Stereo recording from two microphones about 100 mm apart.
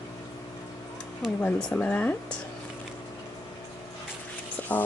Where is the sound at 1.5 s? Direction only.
10° left (ahead or behind).